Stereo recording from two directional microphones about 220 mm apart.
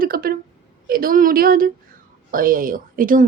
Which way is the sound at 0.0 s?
40° right (ahead or behind).